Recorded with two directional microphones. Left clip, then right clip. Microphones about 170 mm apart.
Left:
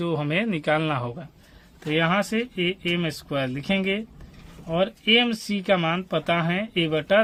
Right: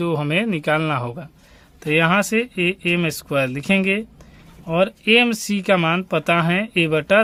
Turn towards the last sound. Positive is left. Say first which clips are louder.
# right 5 dB
turn(degrees=-45)  # may be behind; listen again after turning